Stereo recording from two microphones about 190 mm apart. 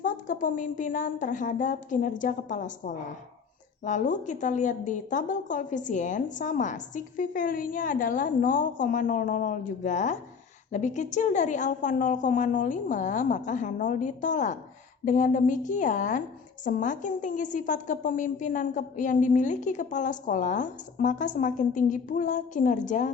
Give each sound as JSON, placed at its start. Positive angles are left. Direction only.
{"t": 0.0, "sound": "a woman's voice", "side_deg": 45}